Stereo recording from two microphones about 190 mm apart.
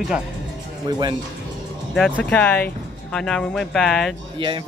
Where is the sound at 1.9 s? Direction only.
5° left (ahead or behind).